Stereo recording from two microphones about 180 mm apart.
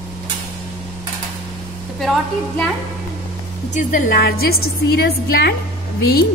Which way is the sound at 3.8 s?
45° left (ahead or behind).